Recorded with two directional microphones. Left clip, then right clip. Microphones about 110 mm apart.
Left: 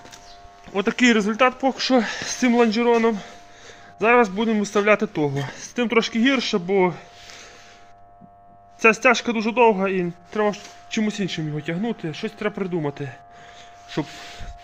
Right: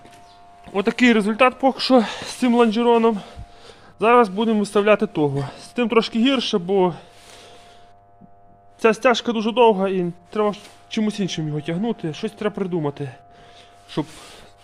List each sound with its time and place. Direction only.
0.7 s speech: 25° right (ahead or behind); by 2.3 s 45° right (ahead or behind)
2.4 s speech: 20° right (ahead or behind)
6.3 s speech: 15° right (ahead or behind)
8.8 s speech: 15° right (ahead or behind)
11.0 s speech: 30° right (ahead or behind)